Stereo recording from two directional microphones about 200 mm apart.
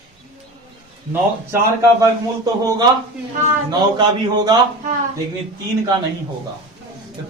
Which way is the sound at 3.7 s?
20° right (ahead or behind).